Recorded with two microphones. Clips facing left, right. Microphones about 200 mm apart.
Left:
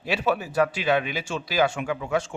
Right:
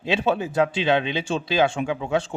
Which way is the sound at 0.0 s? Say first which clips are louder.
Right 3 dB; 25° right (ahead or behind).